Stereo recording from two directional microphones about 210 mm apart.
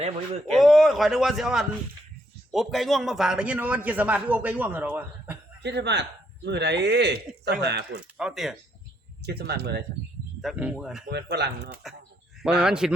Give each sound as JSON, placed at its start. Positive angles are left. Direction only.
{"t": 0.5, "sound": "a man's voice", "side_deg": 0}
{"t": 5.6, "sound": "speech", "side_deg": -55}
{"t": 8.2, "sound": "a man's voice", "side_deg": 0}
{"t": 9.2, "sound": "speech", "side_deg": -50}
{"t": 10.4, "sound": "a man's voice", "side_deg": -5}
{"t": 11.1, "sound": "speech", "side_deg": -50}
{"t": 12.5, "sound": "a man's voice", "side_deg": -5}